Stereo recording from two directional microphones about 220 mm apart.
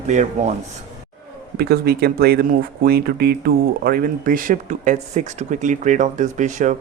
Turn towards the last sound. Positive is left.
turn(degrees=-35)  # may be behind; listen again after turning